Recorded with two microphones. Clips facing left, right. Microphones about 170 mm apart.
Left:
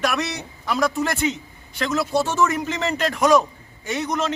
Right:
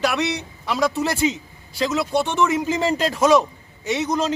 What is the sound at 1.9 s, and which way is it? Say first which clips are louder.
Speech: left 2 dB; centre (ahead or behind).